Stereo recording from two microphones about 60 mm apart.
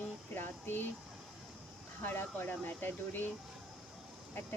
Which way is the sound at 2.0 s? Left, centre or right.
Left.